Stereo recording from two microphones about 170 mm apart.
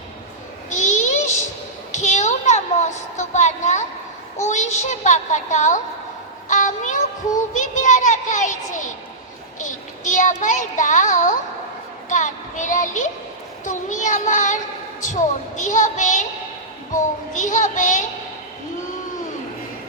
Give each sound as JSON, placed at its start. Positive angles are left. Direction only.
{"t": 0.7, "sound": "a sound", "side_deg": 45}
{"t": 4.4, "sound": "a child's voice", "side_deg": 45}
{"t": 6.5, "sound": "child singing", "side_deg": 45}
{"t": 9.6, "sound": "a sound", "side_deg": 45}
{"t": 10.4, "sound": "a child's voice", "side_deg": 45}
{"t": 13.7, "sound": "child singing", "side_deg": 45}
{"t": 15.0, "sound": "a child's voice", "side_deg": 45}
{"t": 16.9, "sound": "child singing", "side_deg": 45}